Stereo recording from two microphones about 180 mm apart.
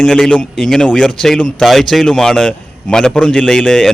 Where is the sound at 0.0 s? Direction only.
5° left (ahead or behind).